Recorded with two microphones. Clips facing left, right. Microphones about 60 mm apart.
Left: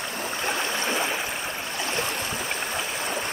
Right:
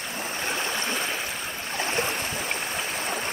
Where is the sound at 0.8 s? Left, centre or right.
Centre.